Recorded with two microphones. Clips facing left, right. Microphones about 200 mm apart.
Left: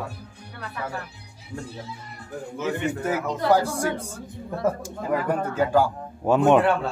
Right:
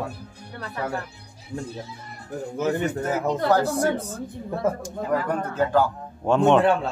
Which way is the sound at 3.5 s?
10° left (ahead or behind).